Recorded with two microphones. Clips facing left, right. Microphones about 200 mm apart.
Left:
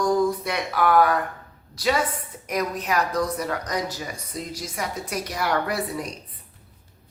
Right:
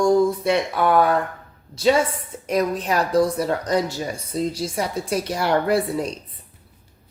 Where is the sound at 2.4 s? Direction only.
30° right (ahead or behind).